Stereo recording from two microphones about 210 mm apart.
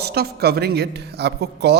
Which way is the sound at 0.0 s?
50° right (ahead or behind).